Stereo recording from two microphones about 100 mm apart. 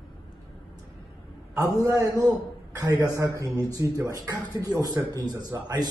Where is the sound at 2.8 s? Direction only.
35° right (ahead or behind).